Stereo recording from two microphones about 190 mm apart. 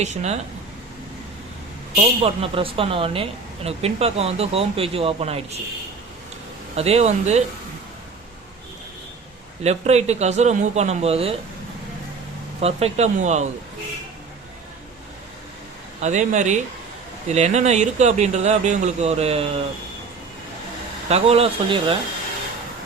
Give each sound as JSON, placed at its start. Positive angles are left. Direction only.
{"t": 0.0, "sound": "a woman's voice", "side_deg": -35}
{"t": 2.2, "sound": "a woman's voice", "side_deg": -30}
{"t": 6.7, "sound": "a woman's voice", "side_deg": -35}
{"t": 9.6, "sound": "a woman's voice", "side_deg": -35}
{"t": 12.5, "sound": "a woman's voice", "side_deg": -35}
{"t": 16.0, "sound": "a woman's voice", "side_deg": -40}
{"t": 21.1, "sound": "a woman's voice", "side_deg": -30}